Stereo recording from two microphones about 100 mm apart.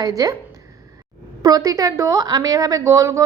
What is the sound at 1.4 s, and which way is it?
A woman's voice, 40° right (ahead or behind).